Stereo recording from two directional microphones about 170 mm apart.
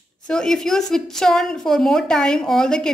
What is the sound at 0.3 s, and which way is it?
A woman's voice, 5° left (ahead or behind).